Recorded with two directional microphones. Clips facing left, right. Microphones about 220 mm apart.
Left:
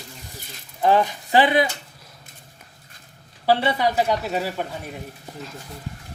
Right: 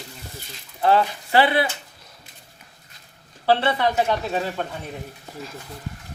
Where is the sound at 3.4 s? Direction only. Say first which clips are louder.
Even; 10° left (ahead or behind).